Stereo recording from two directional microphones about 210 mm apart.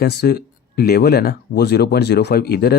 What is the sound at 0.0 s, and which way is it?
Speech, 50° left (ahead or behind).